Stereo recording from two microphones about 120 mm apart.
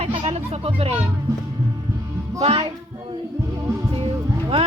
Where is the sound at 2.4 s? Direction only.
55° right (ahead or behind).